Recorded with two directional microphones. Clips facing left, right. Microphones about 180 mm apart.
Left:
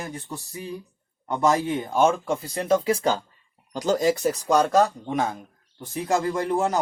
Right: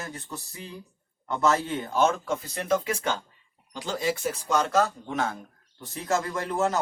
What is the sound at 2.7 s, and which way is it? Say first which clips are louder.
Speech: left 5 dB; 35° left (ahead or behind).